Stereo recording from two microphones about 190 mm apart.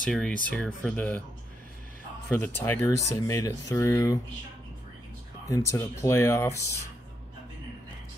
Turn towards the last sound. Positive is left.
turn(degrees=15)  # may be behind; listen again after turning